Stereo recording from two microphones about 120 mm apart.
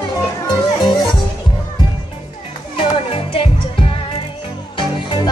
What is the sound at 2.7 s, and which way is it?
Music, 50° left (ahead or behind).